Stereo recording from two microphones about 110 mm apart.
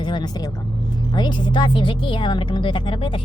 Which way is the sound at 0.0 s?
45° left (ahead or behind).